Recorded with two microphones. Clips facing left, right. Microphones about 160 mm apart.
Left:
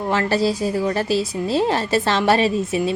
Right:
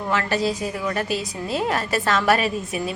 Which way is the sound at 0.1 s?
35° left (ahead or behind).